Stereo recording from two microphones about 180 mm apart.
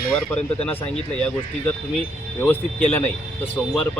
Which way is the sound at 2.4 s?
5° left (ahead or behind).